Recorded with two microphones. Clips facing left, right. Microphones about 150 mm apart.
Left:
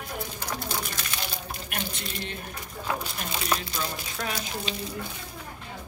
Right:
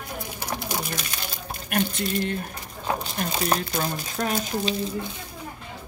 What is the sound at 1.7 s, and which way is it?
Speech, 50° right (ahead or behind).